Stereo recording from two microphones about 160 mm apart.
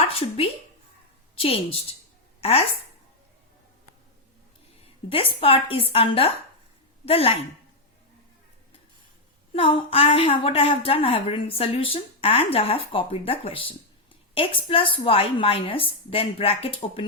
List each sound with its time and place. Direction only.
0.1 s a woman's voice: 35° left (ahead or behind)
5.0 s a woman's voice: 35° left (ahead or behind)
9.5 s a woman's voice: 35° left (ahead or behind)